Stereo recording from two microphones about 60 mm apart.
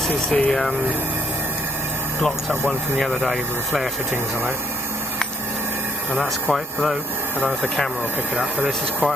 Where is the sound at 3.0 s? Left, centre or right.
Centre.